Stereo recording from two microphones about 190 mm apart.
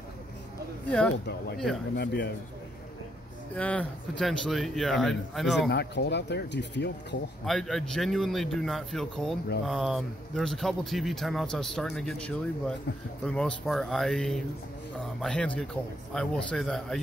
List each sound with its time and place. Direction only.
0.8 s speech: 5° left (ahead or behind)
2.0 s speech: 60° left (ahead or behind)
3.5 s speech: 5° left (ahead or behind)
5.7 s speech: 60° left (ahead or behind)
7.4 s speech: centre (ahead or behind)